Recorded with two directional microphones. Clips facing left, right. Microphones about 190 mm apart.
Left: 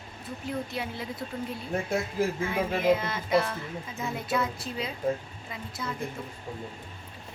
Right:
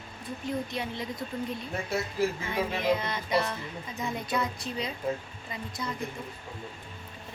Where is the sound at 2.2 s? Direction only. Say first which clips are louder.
Even; 45° left (ahead or behind).